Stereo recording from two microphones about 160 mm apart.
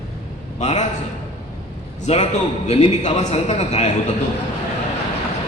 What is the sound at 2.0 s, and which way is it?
A man's voice, 45° left (ahead or behind).